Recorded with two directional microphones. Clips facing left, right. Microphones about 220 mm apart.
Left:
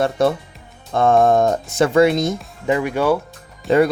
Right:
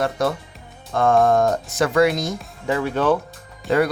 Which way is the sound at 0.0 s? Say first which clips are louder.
Left 4 dB; 25° left (ahead or behind).